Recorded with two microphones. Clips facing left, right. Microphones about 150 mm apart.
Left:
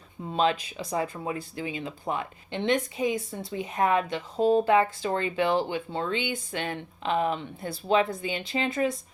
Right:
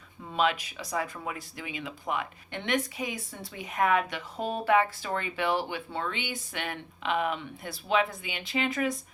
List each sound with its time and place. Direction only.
0.3 s speech: 30° left (ahead or behind)